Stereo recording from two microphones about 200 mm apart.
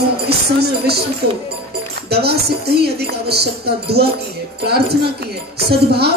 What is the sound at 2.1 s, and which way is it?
Speech, 55° right (ahead or behind).